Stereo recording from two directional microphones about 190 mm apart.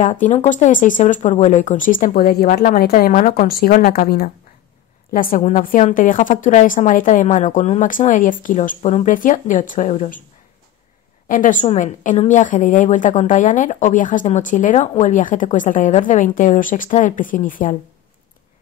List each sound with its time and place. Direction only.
0.0 s a woman's voice: 40° left (ahead or behind); by 4.3 s 55° left (ahead or behind)
5.1 s a woman's voice: 45° left (ahead or behind)
11.2 s a woman's voice: 45° left (ahead or behind)